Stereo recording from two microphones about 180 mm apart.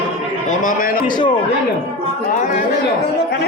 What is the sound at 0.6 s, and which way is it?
Speech, 50° left (ahead or behind).